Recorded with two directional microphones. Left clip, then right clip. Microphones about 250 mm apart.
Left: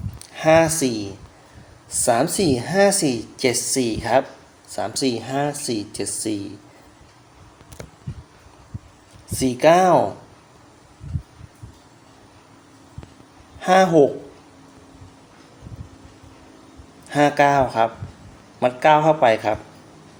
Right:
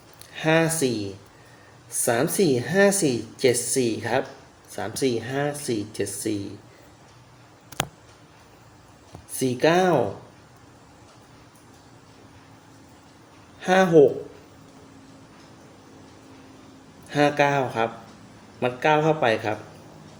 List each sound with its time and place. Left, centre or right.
0.3 s a woman's voice: centre
9.3 s a woman's voice: centre
13.6 s a sound: centre
17.1 s a woman's voice: centre